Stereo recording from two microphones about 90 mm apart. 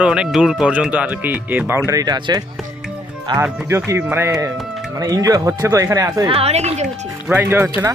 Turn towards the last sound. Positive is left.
turn(degrees=-25)  # may be behind; listen again after turning